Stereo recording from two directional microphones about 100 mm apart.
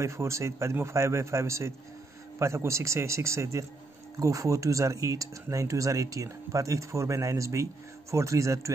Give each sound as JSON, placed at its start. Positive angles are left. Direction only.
{"t": 0.0, "sound": "a man's voice", "side_deg": -30}